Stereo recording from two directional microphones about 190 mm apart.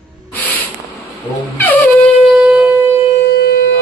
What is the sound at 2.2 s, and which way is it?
Shofar, 5° right (ahead or behind).